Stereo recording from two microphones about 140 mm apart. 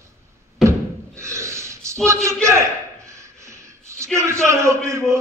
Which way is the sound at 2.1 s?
20° right (ahead or behind).